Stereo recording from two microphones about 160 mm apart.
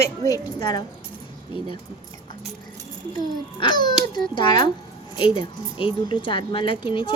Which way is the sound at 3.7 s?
25° left (ahead or behind).